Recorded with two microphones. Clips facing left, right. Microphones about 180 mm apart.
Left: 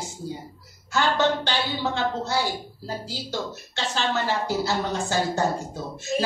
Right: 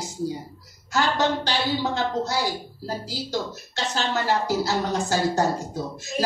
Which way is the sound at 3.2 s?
40° right (ahead or behind).